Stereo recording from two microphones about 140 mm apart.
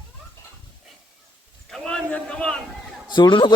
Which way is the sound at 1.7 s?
5° left (ahead or behind).